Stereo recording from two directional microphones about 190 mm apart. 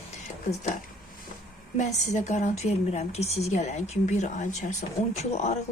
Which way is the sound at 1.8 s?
40° left (ahead or behind).